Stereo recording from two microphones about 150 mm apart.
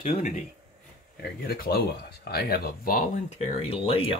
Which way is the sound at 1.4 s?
90° left.